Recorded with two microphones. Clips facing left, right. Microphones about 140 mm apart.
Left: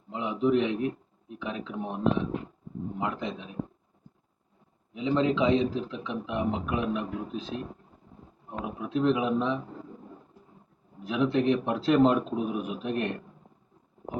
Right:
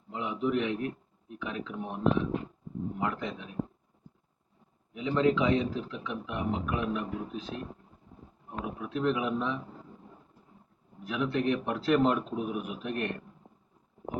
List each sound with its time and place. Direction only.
0.1 s a man's voice: 25° left (ahead or behind)
3.0 s a man's voice: 20° left (ahead or behind)
4.9 s a man's voice: 25° left (ahead or behind)
11.0 s a man's voice: 25° left (ahead or behind)